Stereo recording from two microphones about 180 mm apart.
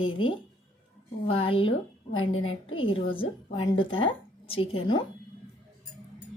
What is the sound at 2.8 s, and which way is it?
A woman's voice, 30° left (ahead or behind).